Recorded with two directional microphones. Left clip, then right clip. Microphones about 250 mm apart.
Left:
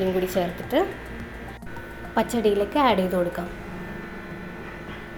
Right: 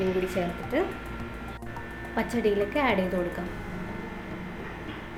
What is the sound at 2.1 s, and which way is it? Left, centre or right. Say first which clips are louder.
A woman's voice: left 5 dB; centre.